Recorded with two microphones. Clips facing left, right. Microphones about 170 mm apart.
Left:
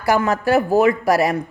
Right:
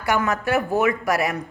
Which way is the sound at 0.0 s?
35° left (ahead or behind).